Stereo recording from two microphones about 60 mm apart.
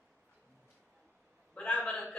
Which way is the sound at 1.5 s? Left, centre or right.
Centre.